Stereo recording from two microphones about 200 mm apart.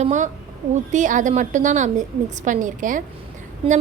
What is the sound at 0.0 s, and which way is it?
A woman's voice, 35° right (ahead or behind).